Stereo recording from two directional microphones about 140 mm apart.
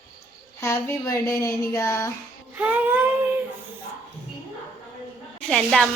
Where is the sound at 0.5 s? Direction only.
20° left (ahead or behind).